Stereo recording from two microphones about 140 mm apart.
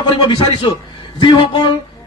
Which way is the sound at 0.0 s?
35° left (ahead or behind).